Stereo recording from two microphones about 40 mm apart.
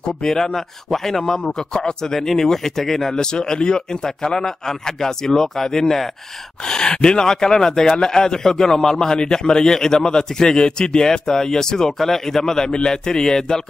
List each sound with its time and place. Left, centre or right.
0.0 s a man's voice: centre